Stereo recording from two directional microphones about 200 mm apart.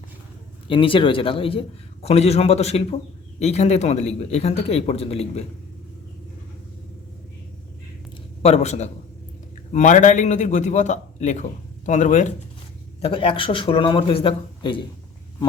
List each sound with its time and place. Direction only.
0.7 s a man's voice: 25° left (ahead or behind)
8.4 s speech: 30° left (ahead or behind)
13.0 s a man's voice: 25° left (ahead or behind)